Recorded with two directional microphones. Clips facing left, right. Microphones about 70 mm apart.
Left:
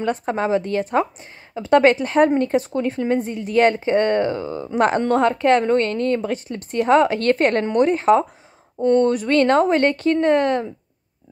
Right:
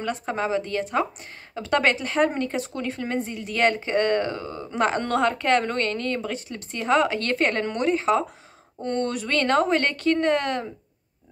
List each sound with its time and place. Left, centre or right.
0.2 s a woman's voice: left
4.7 s a woman's voice: left
5.0 s a woman's voice: left
8.8 s speech: left